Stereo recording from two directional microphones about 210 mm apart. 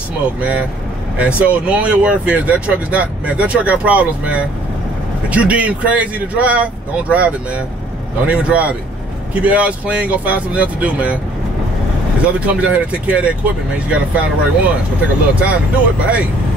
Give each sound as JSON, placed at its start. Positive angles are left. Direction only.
{"t": 0.4, "sound": "speech", "side_deg": -5}
{"t": 12.2, "sound": "speech", "side_deg": -5}